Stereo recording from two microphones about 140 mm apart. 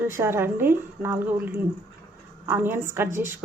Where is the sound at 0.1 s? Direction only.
20° right (ahead or behind).